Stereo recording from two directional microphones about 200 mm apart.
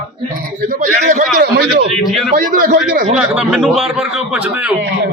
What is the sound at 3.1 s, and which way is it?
Speech, 5° right (ahead or behind).